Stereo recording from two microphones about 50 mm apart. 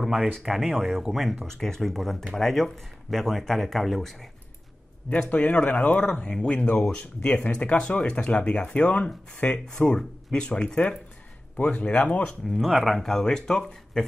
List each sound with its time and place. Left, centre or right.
0.0 s speech: centre
5.3 s speech: left
11.8 s speech: left
12.4 s speech: centre